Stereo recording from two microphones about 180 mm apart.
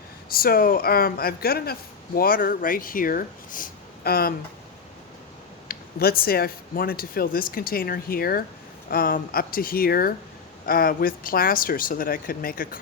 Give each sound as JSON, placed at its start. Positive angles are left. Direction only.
{"t": 0.3, "sound": "speech", "side_deg": 55}
{"t": 5.6, "sound": "speech", "side_deg": 55}